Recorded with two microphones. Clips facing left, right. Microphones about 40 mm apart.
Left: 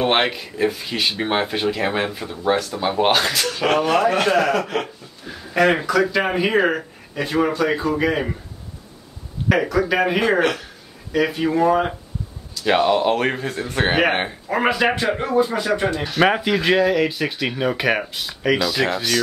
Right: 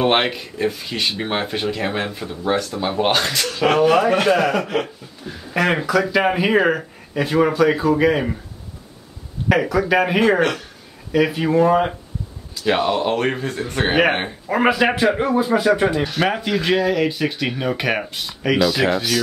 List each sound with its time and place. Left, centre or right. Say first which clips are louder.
0.0 s speech: right 1 dB; centre
9.5 s speech: right 1 dB; centre